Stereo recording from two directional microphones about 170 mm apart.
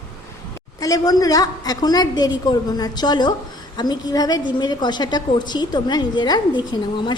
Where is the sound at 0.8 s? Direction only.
20° left (ahead or behind).